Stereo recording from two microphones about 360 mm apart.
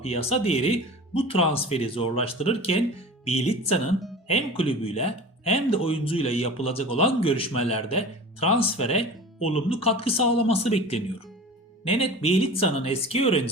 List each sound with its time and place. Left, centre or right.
0.0 s speech: centre